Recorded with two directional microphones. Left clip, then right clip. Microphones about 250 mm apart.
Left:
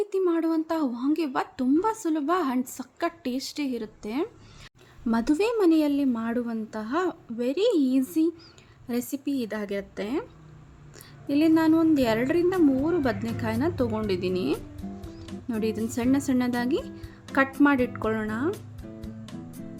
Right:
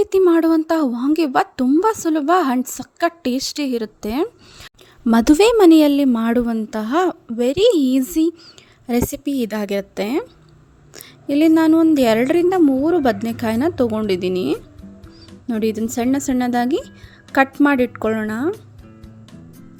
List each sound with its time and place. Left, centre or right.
0.0 s a woman's voice: right
19.0 s music: centre